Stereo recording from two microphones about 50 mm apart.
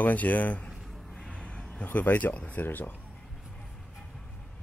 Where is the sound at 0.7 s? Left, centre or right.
Centre.